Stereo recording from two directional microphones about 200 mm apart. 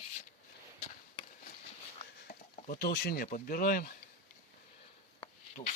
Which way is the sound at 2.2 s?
50° left (ahead or behind).